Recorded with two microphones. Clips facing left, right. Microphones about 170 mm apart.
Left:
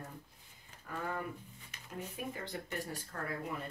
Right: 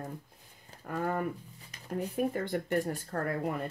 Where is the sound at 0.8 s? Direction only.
50° right (ahead or behind).